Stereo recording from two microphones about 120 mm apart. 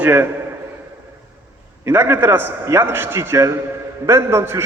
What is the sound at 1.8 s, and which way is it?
A man's voice, 15° right (ahead or behind).